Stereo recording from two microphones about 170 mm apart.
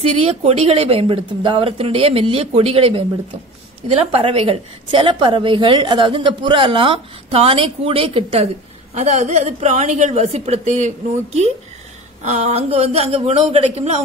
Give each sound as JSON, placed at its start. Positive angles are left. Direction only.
{"t": 0.0, "sound": "a woman's voice", "side_deg": -35}
{"t": 4.1, "sound": "a woman's voice", "side_deg": -35}